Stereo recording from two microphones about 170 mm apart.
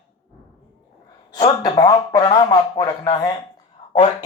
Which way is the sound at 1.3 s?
25° left (ahead or behind).